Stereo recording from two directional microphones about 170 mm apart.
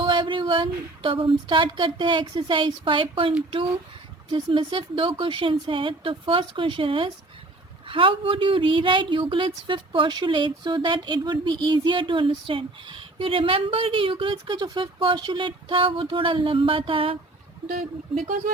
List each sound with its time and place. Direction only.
0.0 s speech: 30° right (ahead or behind)